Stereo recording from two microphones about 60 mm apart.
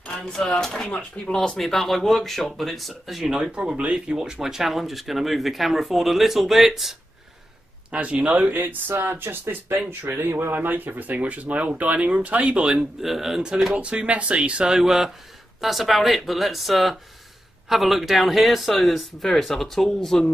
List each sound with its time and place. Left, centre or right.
0.6 s speech: centre
1.6 s speech: centre
7.9 s speech: right
13.0 s speech: centre
13.7 s speech: right; by 20.2 s centre